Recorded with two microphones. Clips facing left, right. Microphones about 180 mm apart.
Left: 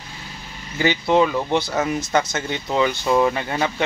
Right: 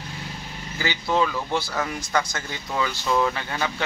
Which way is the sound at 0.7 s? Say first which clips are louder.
Left 6 dB; 25° left (ahead or behind).